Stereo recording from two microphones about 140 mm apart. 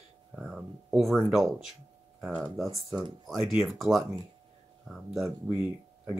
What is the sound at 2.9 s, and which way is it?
Speech, 30° right (ahead or behind).